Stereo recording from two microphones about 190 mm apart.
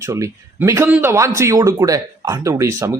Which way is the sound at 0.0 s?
15° right (ahead or behind).